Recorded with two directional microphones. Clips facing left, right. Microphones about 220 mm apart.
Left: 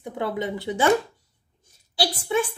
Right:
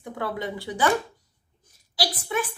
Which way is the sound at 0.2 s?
20° left (ahead or behind).